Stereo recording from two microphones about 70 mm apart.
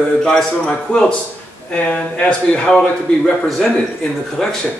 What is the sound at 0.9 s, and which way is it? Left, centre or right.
A man's voice, centre.